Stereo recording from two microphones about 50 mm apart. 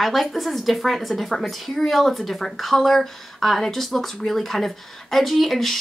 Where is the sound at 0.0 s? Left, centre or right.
Centre.